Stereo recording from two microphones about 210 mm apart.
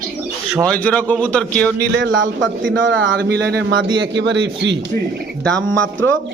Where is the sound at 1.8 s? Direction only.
60° right (ahead or behind).